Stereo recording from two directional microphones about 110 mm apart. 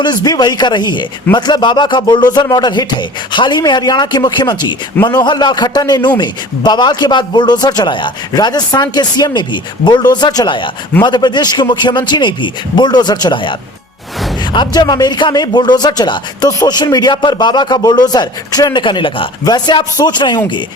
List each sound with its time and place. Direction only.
0.0 s a man's voice: 40° left (ahead or behind)
14.5 s speech: 40° left (ahead or behind)